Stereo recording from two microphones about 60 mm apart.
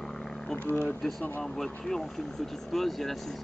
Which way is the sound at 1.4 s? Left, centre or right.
Centre.